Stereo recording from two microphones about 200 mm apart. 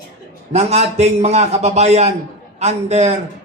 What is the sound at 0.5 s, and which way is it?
Speech, 35° right (ahead or behind).